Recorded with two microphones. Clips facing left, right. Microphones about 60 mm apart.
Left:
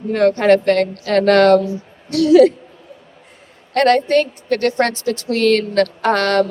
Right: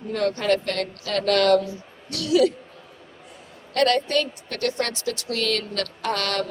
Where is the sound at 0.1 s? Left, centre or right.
Left.